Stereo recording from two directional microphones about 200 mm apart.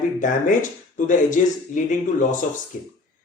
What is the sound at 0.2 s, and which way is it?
Speech, 40° left (ahead or behind).